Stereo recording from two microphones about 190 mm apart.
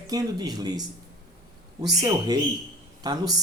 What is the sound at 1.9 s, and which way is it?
Speech, 20° right (ahead or behind).